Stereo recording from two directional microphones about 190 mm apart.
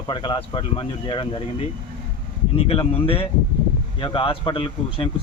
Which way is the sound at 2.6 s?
30° left (ahead or behind).